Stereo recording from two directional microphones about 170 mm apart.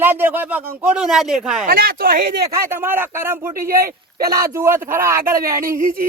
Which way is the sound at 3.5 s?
60° right (ahead or behind).